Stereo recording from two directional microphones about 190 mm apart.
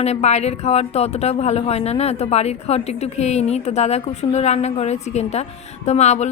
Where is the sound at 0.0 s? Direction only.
35° left (ahead or behind).